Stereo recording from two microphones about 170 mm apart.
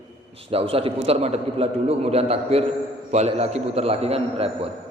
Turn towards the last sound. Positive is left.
turn(degrees=-35)  # may be behind; listen again after turning